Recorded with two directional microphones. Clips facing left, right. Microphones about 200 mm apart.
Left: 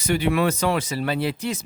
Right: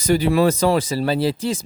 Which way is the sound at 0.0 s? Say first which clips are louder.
Right 5 dB; 35° right (ahead or behind).